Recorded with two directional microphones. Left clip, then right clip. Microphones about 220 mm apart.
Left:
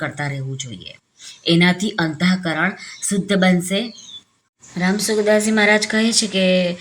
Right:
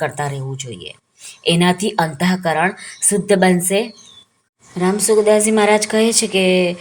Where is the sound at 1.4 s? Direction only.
15° right (ahead or behind).